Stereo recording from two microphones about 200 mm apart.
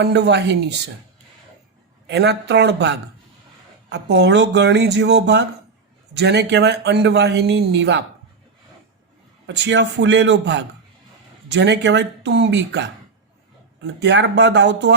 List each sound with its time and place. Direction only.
0.0 s a man's voice: 55° right (ahead or behind)
2.0 s a man's voice: 60° right (ahead or behind)
9.5 s a man's voice: 65° right (ahead or behind)
14.0 s a man's voice: 60° right (ahead or behind)